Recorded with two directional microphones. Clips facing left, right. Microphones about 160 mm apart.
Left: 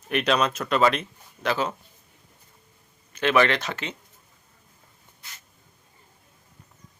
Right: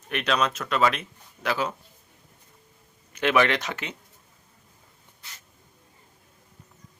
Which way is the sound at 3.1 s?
15° right (ahead or behind).